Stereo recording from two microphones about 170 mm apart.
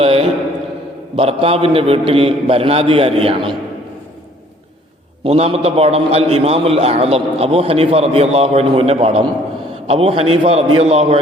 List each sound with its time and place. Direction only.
0.0 s a sound: 35° right (ahead or behind)
1.1 s a man's voice: 35° right (ahead or behind)
5.2 s a man's voice: 35° right (ahead or behind)